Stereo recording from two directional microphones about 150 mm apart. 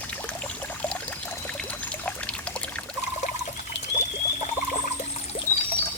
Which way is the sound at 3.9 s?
55° left (ahead or behind).